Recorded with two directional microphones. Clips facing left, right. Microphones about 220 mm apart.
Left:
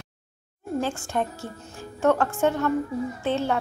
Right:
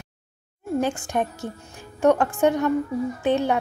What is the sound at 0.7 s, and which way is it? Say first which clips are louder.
A woman's voice: right 3 dB; 15° right (ahead or behind).